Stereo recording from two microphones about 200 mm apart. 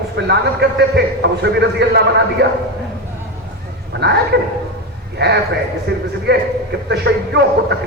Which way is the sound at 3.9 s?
55° right (ahead or behind).